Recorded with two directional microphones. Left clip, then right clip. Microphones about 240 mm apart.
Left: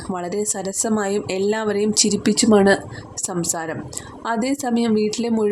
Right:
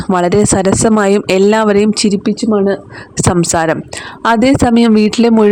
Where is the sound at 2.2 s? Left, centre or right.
Centre.